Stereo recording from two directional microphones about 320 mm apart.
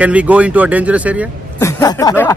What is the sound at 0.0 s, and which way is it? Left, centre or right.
Speech, centre.